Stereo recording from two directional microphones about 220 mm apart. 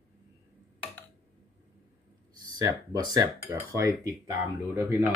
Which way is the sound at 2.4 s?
15° right (ahead or behind).